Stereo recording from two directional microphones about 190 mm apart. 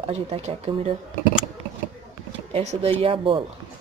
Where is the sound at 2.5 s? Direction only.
35° right (ahead or behind).